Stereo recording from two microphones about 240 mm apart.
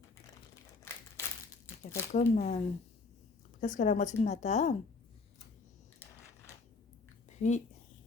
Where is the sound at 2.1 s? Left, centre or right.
Left.